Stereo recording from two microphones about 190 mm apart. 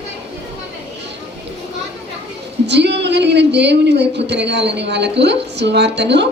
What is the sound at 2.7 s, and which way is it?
Speech, 65° right (ahead or behind).